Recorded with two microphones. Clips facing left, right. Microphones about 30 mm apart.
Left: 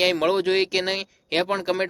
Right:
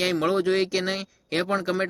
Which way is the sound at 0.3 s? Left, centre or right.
Left.